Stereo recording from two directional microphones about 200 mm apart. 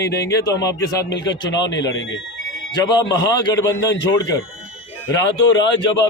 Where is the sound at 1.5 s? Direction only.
65° left (ahead or behind).